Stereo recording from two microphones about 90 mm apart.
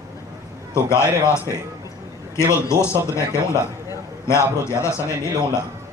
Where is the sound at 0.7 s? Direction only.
30° left (ahead or behind).